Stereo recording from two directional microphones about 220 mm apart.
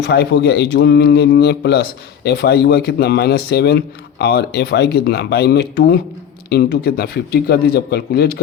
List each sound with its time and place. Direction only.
0.0 s speech: 50° left (ahead or behind)